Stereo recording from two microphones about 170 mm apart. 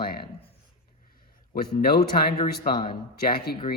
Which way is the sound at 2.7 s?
30° left (ahead or behind).